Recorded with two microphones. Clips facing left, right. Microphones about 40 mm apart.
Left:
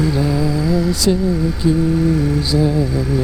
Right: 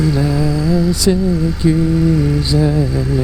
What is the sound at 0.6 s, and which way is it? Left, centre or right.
Mantra, centre.